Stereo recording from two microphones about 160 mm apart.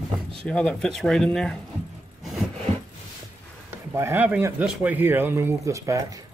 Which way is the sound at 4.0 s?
15° right (ahead or behind).